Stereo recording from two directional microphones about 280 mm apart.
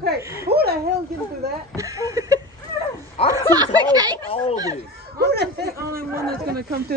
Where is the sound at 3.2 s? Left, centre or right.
Left.